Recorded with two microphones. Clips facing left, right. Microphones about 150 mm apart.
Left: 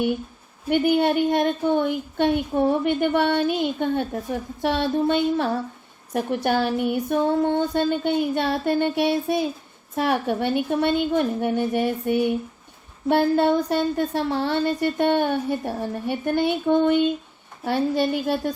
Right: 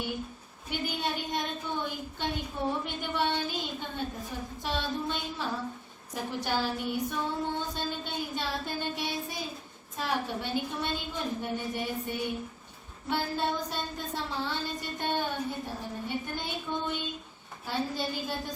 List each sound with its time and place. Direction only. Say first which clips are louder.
0.7 s a woman's voice: left 14 dB; 60° left (ahead or behind)